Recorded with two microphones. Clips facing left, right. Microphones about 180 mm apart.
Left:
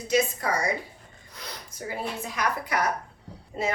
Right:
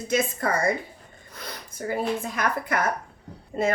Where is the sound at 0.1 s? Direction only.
50° right (ahead or behind).